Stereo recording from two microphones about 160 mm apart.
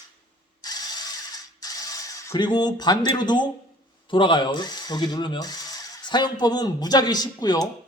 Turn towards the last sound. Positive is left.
turn(degrees=25)  # may be behind; listen again after turning